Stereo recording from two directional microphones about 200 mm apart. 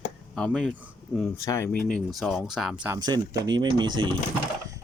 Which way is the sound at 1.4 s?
15° left (ahead or behind).